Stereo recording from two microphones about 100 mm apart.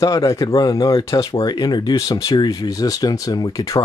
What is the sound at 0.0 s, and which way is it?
Speech, 35° left (ahead or behind).